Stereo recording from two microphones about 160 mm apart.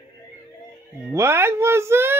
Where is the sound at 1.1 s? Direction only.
15° right (ahead or behind).